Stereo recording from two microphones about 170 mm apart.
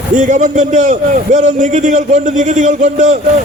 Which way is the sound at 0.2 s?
50° right (ahead or behind).